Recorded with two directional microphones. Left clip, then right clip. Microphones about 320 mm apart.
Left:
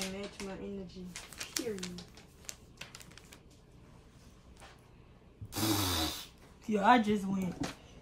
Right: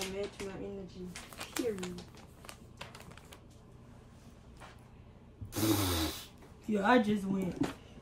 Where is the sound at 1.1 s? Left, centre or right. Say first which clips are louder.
Even; centre.